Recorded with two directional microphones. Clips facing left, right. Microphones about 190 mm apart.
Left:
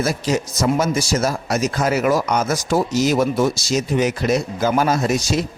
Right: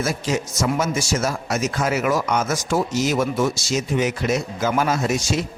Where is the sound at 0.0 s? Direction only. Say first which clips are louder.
Left 3 dB; 35° left (ahead or behind).